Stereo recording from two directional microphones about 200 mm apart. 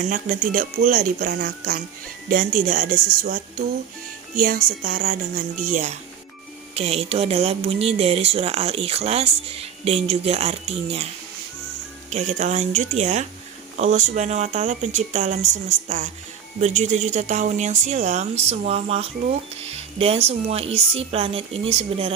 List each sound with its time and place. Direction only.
0.0 s speech: 40° right (ahead or behind)
12.1 s speech: 35° right (ahead or behind)
16.6 s speech: 35° right (ahead or behind)